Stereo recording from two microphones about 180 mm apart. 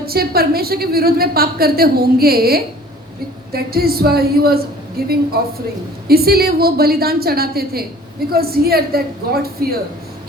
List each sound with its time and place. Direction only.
0.0 s a woman's voice: 60° right (ahead or behind)